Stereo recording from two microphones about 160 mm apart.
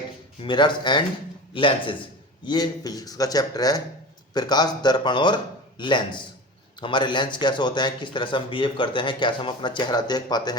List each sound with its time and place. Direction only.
0.4 s speech: 30° left (ahead or behind)